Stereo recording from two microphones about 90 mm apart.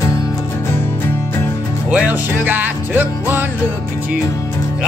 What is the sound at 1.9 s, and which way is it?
Music, 20° right (ahead or behind).